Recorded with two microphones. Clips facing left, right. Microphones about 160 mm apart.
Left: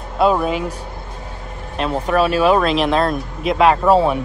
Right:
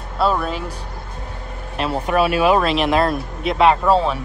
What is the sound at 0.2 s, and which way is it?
Speech, 10° left (ahead or behind).